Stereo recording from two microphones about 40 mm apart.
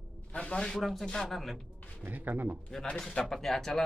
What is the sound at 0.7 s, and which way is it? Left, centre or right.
Speech, centre.